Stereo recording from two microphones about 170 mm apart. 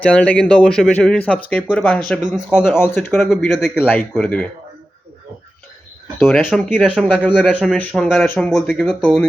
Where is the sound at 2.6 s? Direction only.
10° left (ahead or behind).